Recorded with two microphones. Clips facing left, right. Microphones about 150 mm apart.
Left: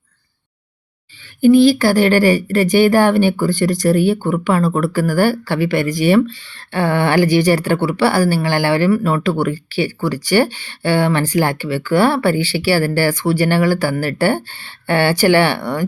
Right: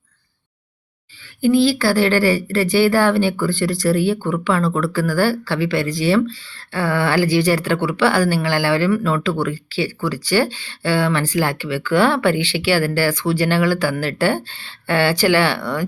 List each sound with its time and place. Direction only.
1.4 s speech: 20° left (ahead or behind)